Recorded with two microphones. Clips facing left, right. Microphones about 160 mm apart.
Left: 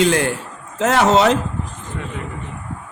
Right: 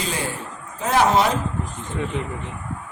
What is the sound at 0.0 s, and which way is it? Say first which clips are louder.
Speech: left 10 dB; 80° left.